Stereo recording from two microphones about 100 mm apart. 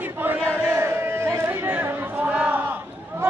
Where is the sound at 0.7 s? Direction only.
25° right (ahead or behind).